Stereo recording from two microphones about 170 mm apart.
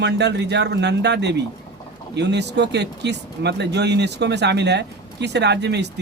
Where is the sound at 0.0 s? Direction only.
90° right.